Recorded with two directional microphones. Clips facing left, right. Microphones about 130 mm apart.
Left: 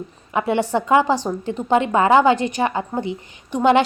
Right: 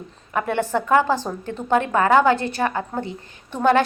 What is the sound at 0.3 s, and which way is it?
A woman's voice, 15° left (ahead or behind).